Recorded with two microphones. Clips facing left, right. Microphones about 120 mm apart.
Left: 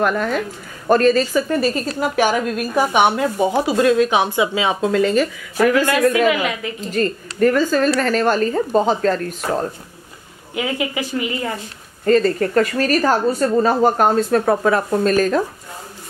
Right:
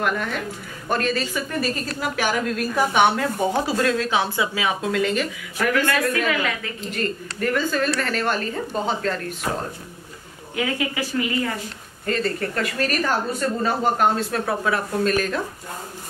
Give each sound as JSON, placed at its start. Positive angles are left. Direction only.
{"t": 0.8, "sound": "a woman's voice", "side_deg": 40}
{"t": 1.6, "sound": "a woman's voice", "side_deg": 25}
{"t": 4.9, "sound": "a woman's voice", "side_deg": 35}
{"t": 5.9, "sound": "a woman's voice", "side_deg": 15}
{"t": 7.0, "sound": "a woman's voice", "side_deg": 35}
{"t": 10.5, "sound": "a woman's voice", "side_deg": 20}
{"t": 12.1, "sound": "a woman's voice", "side_deg": 40}